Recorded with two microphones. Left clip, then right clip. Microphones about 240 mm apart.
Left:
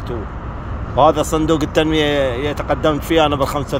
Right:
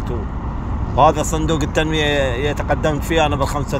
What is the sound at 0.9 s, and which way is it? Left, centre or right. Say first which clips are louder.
Speech: left 1 dB; left.